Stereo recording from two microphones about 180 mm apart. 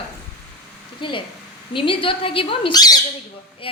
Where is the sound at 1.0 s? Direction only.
25° left (ahead or behind).